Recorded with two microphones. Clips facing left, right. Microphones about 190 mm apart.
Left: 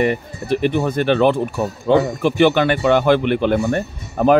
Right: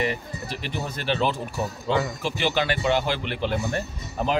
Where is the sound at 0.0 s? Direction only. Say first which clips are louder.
Left 8 dB; 55° left (ahead or behind).